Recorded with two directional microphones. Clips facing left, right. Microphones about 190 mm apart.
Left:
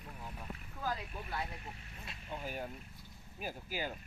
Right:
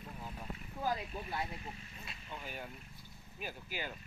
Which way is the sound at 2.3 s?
40° left (ahead or behind).